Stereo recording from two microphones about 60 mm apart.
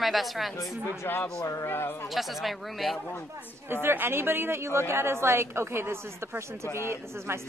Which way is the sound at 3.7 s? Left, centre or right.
Right.